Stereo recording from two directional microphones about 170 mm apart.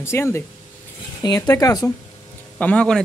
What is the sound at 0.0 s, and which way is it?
Speech, 15° left (ahead or behind).